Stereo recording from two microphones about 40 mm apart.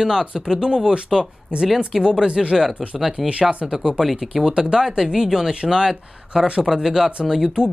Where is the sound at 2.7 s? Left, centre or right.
Right.